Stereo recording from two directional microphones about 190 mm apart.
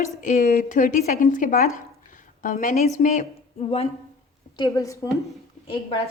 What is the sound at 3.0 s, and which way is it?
Speech, 40° left (ahead or behind).